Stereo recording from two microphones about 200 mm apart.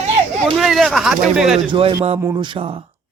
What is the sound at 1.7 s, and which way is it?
A man's voice, 25° right (ahead or behind).